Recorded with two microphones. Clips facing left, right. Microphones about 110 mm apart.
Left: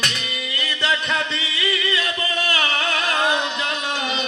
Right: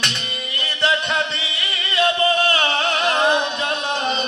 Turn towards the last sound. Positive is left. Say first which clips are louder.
# right 3 dB
turn(degrees=-30)  # may be behind; listen again after turning